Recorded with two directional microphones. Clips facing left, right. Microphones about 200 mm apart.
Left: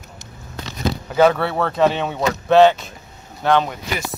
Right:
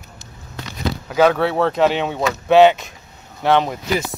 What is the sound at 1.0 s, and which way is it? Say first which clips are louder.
Speech: even; 5° right (ahead or behind).